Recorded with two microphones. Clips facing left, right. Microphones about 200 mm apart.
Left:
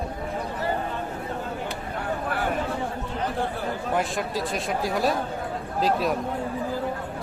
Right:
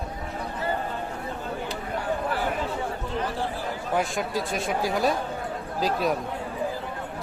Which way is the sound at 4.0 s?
Centre (ahead or behind).